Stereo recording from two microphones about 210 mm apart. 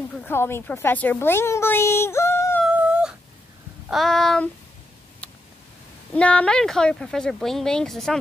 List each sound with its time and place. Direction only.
0.2 s a woman's voice: 10° left (ahead or behind)
2.6 s dog: 5° right (ahead or behind)
3.9 s speech: centre (ahead or behind)
5.2 s a sound: 5° left (ahead or behind)
6.1 s speech: 5° left (ahead or behind)